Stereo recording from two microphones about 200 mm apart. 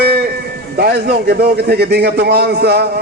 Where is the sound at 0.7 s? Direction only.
50° right (ahead or behind).